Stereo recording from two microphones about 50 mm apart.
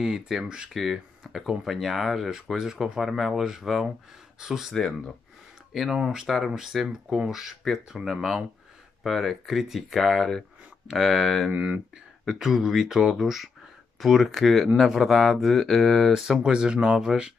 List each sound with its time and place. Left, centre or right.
0.0 s speech: centre
4.7 s speech: centre
5.7 s speech: centre
6.2 s speech: centre
11.5 s speech: right
12.3 s speech: centre
16.1 s speech: centre